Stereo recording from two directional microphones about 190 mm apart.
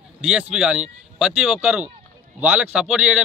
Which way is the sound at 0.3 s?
5° right (ahead or behind).